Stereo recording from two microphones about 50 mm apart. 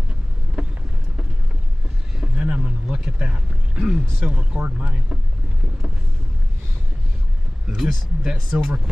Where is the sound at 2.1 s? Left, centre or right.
Centre.